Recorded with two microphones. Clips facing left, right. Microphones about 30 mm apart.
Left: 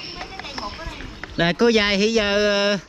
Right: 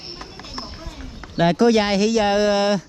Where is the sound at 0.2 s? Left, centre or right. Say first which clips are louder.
Left 5 dB; left.